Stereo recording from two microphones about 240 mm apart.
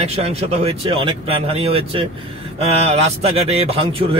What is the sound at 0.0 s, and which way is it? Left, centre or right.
Speech, right.